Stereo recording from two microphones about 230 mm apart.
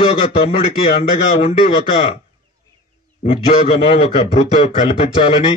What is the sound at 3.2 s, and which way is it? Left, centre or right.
A man's voice, left.